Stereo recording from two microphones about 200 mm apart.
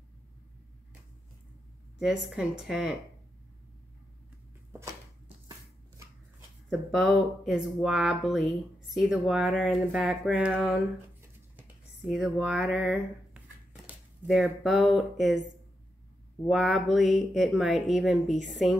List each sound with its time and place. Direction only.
2.0 s speech: centre (ahead or behind)
6.7 s speech: centre (ahead or behind)
16.4 s speech: centre (ahead or behind)